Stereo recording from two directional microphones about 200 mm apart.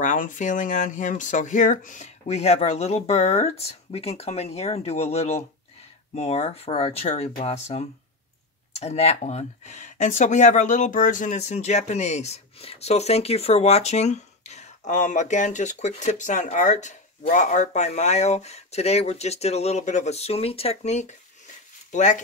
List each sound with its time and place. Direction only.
0.0 s speech: 40° left (ahead or behind)